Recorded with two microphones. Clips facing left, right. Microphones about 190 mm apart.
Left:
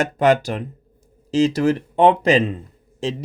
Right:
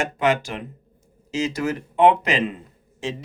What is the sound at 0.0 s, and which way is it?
Speech, 40° left (ahead or behind).